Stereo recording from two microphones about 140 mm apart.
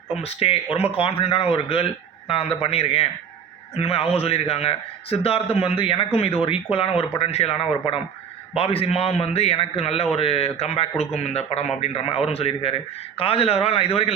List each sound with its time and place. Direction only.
0.2 s a man's voice: 45° left (ahead or behind)